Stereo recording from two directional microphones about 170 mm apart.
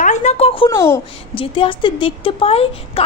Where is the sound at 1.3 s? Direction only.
30° left (ahead or behind).